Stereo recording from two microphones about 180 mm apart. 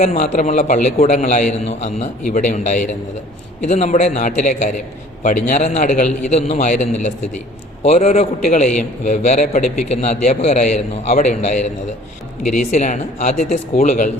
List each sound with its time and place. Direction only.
0.0 s a man's voice: 40° left (ahead or behind)
12.7 s a man's voice: 40° left (ahead or behind)